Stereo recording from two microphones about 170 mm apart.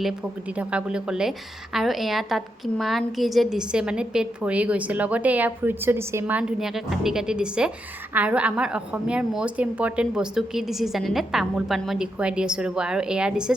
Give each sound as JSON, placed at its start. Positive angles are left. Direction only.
{"t": 0.5, "sound": "a woman's voice", "side_deg": -10}